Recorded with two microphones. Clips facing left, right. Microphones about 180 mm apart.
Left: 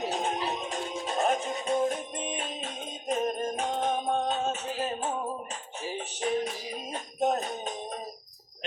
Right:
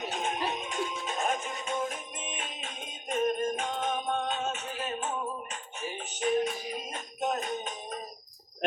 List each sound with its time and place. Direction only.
0.0 s music: 35° left (ahead or behind)
6.9 s music: 35° left (ahead or behind)